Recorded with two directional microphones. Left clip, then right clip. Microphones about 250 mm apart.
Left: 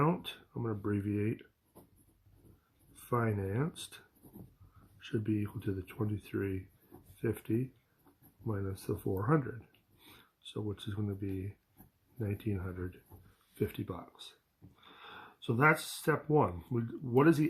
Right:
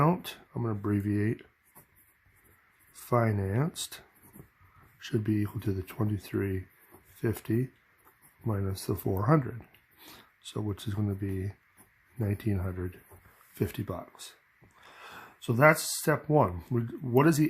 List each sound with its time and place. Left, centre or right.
0.0 s speech: right
3.1 s speech: right